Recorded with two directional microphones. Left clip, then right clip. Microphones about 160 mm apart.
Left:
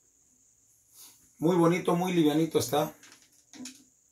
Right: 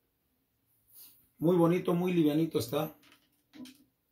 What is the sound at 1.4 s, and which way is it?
Speech, 5° right (ahead or behind).